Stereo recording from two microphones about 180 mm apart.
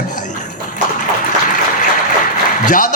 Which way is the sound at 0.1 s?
45° left (ahead or behind).